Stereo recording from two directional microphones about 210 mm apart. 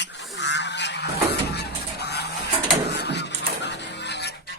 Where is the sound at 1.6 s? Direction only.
50° left (ahead or behind).